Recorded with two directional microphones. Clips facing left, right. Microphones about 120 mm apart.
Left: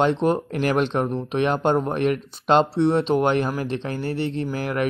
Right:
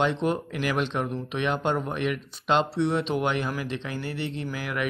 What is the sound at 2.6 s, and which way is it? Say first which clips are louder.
Speech: left 6 dB; 30° left (ahead or behind).